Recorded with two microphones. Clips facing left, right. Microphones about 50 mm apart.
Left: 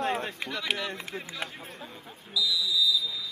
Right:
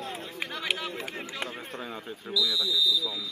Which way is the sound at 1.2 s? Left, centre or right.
Right.